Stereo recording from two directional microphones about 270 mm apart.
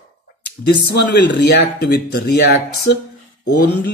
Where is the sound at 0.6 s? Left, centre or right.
Left.